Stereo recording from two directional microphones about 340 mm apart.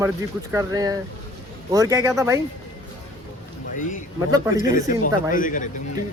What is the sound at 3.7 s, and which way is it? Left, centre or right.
Speech, left.